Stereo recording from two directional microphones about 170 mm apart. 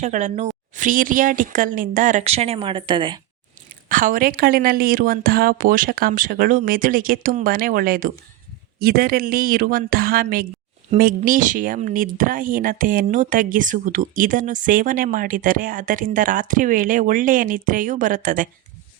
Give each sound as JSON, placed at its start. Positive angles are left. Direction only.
{"t": 0.0, "sound": "speech", "side_deg": -45}
{"t": 3.8, "sound": "a woman's voice", "side_deg": -55}
{"t": 10.9, "sound": "speech", "side_deg": -45}